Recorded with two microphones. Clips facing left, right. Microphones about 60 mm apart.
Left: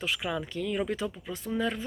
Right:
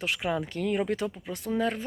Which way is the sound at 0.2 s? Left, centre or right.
Right.